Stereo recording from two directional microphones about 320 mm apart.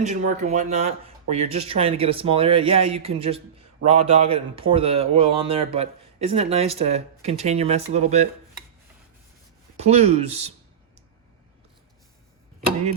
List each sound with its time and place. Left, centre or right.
0.0 s speech: right
9.7 s speech: centre